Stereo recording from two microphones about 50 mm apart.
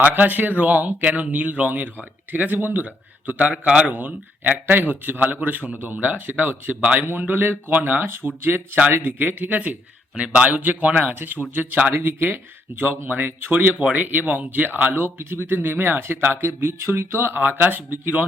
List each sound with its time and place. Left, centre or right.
0.0 s speech: right
3.9 s a man's voice: right
10.6 s speech: right
17.3 s speech: right